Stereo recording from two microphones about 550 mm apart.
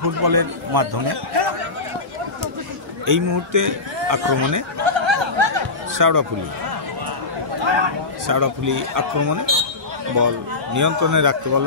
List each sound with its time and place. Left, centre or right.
0.2 s a man's voice: right
3.1 s a man's voice: right
4.8 s a sound: right
5.9 s speech: right
7.6 s speech: right
8.3 s a man's voice: right